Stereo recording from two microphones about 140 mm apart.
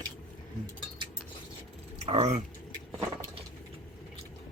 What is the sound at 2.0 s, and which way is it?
Speech, 50° right (ahead or behind).